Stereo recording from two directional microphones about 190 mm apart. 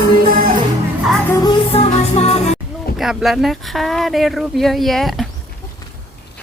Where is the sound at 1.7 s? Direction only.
35° left (ahead or behind).